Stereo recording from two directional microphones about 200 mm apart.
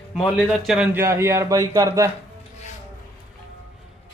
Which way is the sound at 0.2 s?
Centre (ahead or behind).